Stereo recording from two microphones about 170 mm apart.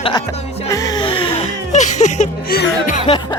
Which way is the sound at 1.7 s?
45° left (ahead or behind).